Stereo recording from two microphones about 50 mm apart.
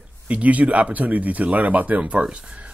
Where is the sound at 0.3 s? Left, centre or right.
Right.